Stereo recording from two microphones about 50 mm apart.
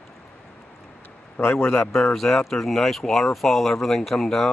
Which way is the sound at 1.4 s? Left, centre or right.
Left.